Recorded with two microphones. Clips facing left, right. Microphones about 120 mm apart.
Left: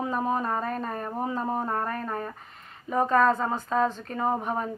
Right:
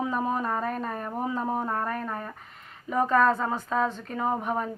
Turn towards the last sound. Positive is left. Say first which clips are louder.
# even
turn(degrees=0)  # may be behind; listen again after turning